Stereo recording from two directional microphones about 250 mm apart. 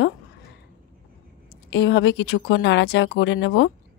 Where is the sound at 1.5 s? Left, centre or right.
Left.